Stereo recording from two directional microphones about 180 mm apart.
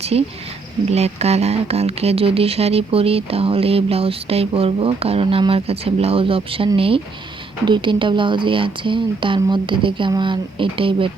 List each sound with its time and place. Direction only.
0.0 s speech: 35° right (ahead or behind)